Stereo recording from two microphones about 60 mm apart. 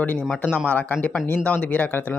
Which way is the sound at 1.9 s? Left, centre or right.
Left.